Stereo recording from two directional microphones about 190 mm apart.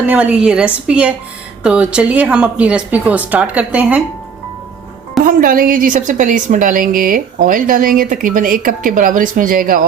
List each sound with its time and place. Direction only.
0.1 s a woman's voice: 10° right (ahead or behind)
5.2 s a woman's voice: 50° right (ahead or behind)